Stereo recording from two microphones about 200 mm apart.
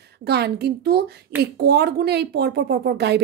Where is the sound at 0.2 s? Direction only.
55° right (ahead or behind).